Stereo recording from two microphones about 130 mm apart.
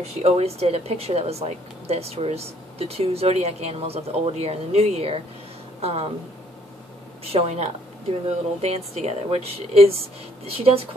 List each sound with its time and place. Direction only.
0.0 s a woman's voice: 50° right (ahead or behind)
7.3 s a woman's voice: 55° right (ahead or behind)